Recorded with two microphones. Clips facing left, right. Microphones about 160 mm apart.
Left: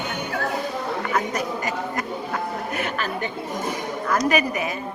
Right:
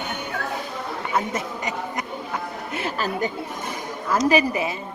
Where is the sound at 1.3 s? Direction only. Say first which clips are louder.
Left 2 dB; 20° right (ahead or behind).